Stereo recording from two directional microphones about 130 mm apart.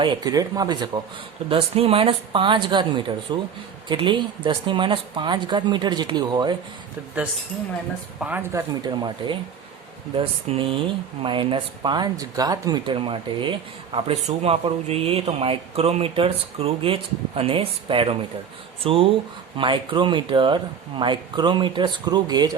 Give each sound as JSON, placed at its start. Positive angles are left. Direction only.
{"t": 0.0, "sound": "speech", "side_deg": -35}
{"t": 1.5, "sound": "speech", "side_deg": -50}
{"t": 8.3, "sound": "speech", "side_deg": -15}
{"t": 8.9, "sound": "speech", "side_deg": -35}
{"t": 13.9, "sound": "speech", "side_deg": -50}